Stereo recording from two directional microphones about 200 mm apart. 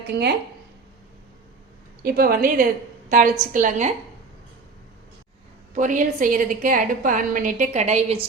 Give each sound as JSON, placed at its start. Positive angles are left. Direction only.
{"t": 2.0, "sound": "a woman's voice", "side_deg": -50}
{"t": 5.7, "sound": "a woman's voice", "side_deg": -40}